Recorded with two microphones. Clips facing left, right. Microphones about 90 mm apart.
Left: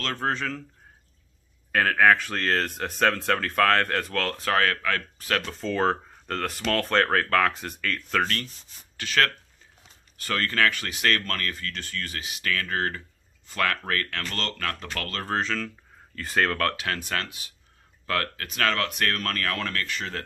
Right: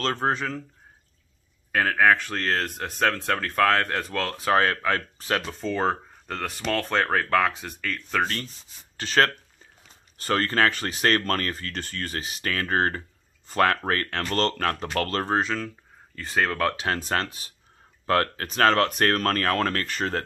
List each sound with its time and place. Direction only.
0.0 s speech: 20° right (ahead or behind)
1.7 s speech: 5° right (ahead or behind)
4.5 s speech: 25° right (ahead or behind)
5.4 s speech: 5° right (ahead or behind)
8.9 s speech: 35° right (ahead or behind)
15.2 s speech: 15° right (ahead or behind)
16.7 s speech: 30° right (ahead or behind)